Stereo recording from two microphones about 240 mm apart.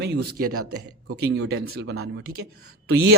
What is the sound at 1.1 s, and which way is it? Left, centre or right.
Speech, right.